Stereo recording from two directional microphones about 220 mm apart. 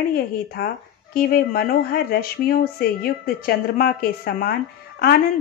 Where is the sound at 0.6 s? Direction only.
45° left (ahead or behind).